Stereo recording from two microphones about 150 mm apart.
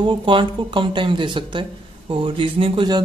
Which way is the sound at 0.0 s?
35° right (ahead or behind).